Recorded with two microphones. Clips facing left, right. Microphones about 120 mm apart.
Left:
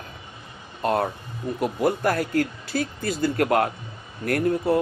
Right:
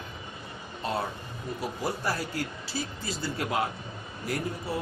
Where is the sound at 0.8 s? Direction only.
55° left (ahead or behind).